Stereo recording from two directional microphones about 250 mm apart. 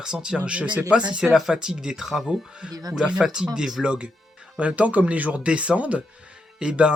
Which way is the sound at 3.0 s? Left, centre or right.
Centre.